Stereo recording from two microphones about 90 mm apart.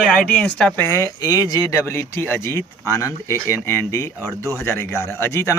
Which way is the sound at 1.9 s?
25° left (ahead or behind).